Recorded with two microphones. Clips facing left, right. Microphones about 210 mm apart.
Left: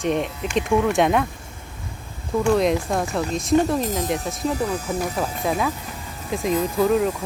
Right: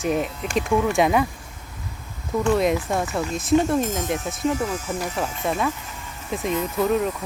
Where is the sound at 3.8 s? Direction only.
35° left (ahead or behind).